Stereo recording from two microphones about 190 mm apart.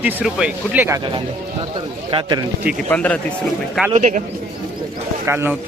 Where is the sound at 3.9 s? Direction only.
40° right (ahead or behind).